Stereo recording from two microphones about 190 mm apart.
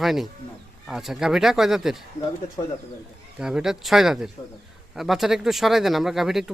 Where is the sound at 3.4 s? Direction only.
5° right (ahead or behind).